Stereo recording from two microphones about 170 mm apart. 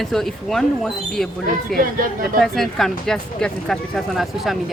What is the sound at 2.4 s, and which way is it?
Speech, centre (ahead or behind).